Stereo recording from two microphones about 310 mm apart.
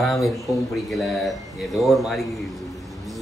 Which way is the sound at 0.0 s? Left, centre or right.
Centre.